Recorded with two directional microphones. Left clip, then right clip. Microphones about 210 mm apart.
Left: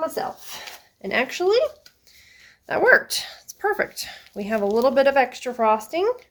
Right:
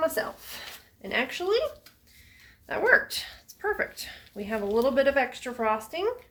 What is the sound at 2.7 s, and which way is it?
Speech, 60° left (ahead or behind).